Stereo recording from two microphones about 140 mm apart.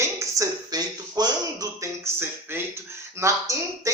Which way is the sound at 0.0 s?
20° right (ahead or behind).